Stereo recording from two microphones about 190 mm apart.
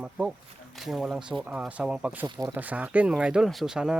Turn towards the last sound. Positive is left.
turn(degrees=-5)  # may be behind; listen again after turning